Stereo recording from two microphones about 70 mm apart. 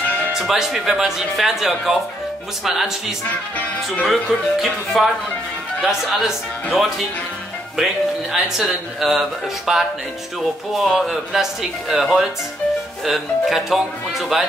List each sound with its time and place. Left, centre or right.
0.4 s speech: centre
3.3 s speech: centre
4.1 s speech: centre